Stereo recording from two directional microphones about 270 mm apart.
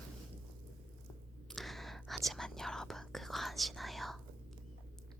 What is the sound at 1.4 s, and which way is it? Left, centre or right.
Speech, centre.